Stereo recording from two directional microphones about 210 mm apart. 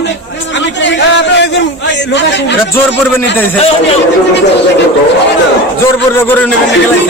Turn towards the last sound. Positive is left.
turn(degrees=10)  # may be behind; listen again after turning